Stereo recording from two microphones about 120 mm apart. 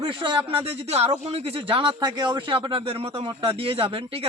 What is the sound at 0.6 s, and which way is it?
Speech, 60° right (ahead or behind).